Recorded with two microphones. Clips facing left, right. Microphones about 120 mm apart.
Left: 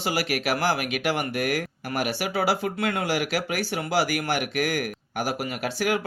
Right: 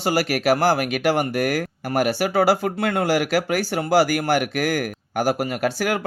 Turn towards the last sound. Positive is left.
turn(degrees=-45)  # may be behind; listen again after turning